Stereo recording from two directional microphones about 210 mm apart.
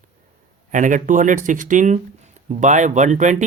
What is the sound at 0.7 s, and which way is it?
Speech, 35° right (ahead or behind).